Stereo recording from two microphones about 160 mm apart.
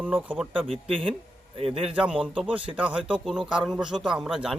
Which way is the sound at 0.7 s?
35° right (ahead or behind).